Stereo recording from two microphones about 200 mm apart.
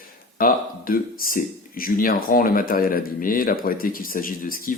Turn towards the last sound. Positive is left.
turn(degrees=45)  # may be behind; listen again after turning